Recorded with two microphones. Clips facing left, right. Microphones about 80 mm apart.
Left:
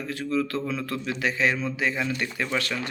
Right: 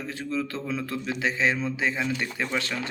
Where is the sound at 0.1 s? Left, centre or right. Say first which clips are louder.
Left 4 dB; right.